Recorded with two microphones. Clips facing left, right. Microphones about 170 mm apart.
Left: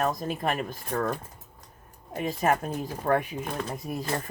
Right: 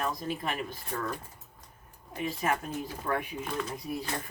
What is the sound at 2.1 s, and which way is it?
Speech, 45° left (ahead or behind).